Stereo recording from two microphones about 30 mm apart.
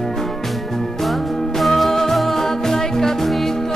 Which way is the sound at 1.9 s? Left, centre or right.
Centre.